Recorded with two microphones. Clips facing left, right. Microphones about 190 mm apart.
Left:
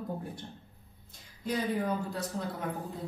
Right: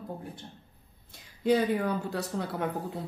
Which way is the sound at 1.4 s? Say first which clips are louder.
Right 6 dB; 75° right (ahead or behind).